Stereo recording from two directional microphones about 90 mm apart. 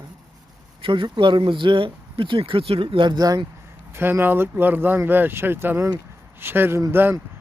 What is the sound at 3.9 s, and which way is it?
Speech, 25° right (ahead or behind).